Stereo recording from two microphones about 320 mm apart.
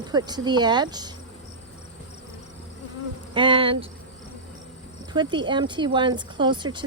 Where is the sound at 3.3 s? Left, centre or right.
Centre.